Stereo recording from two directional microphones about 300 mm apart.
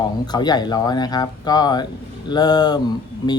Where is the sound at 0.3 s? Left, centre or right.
Centre.